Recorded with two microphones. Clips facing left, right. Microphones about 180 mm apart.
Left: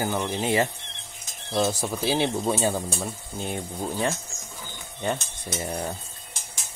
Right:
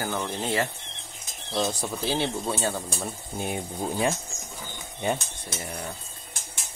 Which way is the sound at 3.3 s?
10° right (ahead or behind).